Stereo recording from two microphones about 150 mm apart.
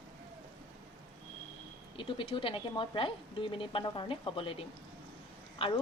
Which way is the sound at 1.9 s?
35° left (ahead or behind).